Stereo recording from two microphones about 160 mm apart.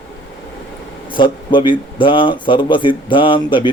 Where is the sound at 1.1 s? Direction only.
30° left (ahead or behind).